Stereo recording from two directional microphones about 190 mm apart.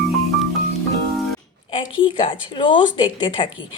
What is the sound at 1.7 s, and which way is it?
Speech, 25° left (ahead or behind).